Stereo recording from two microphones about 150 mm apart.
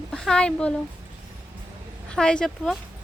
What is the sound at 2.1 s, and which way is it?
Speech, 5° left (ahead or behind).